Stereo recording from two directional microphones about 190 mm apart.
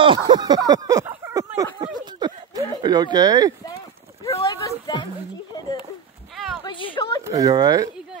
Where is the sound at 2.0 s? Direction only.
20° right (ahead or behind).